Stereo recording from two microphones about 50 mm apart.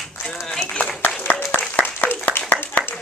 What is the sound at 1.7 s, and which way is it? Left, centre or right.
Applause, left.